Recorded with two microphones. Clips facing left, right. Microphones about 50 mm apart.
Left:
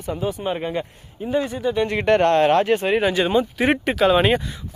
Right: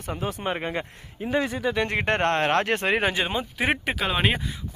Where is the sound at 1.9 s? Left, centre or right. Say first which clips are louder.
Left 10 dB; right.